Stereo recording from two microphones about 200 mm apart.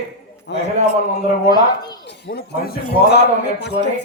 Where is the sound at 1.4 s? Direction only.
20° left (ahead or behind).